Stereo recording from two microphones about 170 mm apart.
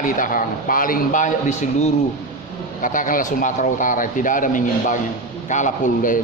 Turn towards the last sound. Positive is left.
turn(degrees=50)  # may be behind; listen again after turning